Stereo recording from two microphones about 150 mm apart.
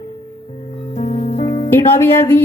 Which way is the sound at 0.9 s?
45° left (ahead or behind).